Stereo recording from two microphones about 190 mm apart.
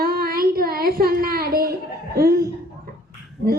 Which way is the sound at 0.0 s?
55° right (ahead or behind).